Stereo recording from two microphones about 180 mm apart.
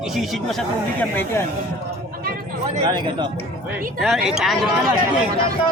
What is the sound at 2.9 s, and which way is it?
Speech, 25° right (ahead or behind).